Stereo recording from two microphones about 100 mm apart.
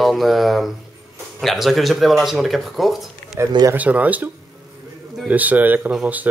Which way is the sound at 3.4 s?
30° right (ahead or behind).